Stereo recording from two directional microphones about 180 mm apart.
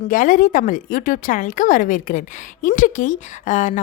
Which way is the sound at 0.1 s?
50° left (ahead or behind).